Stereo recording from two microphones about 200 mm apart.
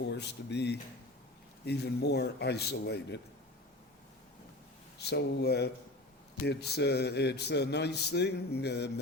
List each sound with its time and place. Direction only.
0.0 s a man's voice: 60° left (ahead or behind)
4.9 s a man's voice: 55° left (ahead or behind)